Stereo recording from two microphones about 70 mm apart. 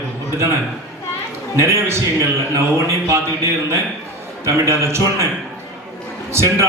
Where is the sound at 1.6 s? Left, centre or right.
Right.